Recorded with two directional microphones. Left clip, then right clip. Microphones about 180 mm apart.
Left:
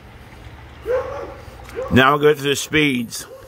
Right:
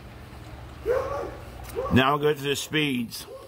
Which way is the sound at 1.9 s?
15° left (ahead or behind).